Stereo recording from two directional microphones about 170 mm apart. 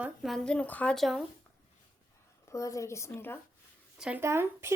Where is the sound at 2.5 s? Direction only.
20° left (ahead or behind).